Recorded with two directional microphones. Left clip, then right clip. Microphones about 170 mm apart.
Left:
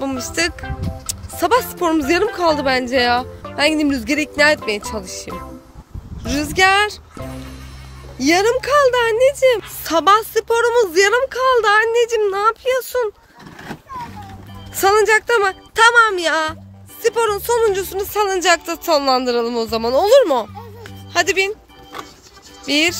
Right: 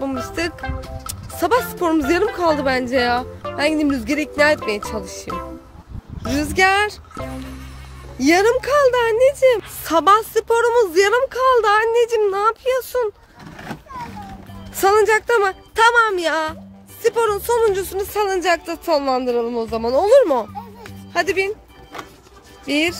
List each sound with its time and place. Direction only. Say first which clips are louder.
0.0 s speech: left 3 dB; centre (ahead or behind)
6.2 s speech: left 1 dB; 10° right (ahead or behind)
8.2 s a woman's voice: even; 20° right (ahead or behind)
8.5 s speech: left 1 dB; 5° right (ahead or behind)
13.6 s vehicle: left 1 dB; 20° right (ahead or behind)
14.8 s speech: left 1 dB; 5° right (ahead or behind)